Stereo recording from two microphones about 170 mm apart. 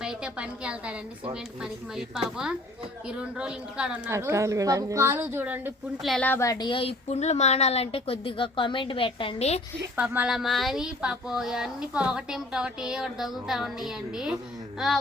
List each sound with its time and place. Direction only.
0.0 s a woman's voice: 5° right (ahead or behind)
4.1 s a woman's voice: 15° right (ahead or behind)
6.0 s speech: centre (ahead or behind); by 9.6 s 35° left (ahead or behind)
9.9 s speech: 10° right (ahead or behind)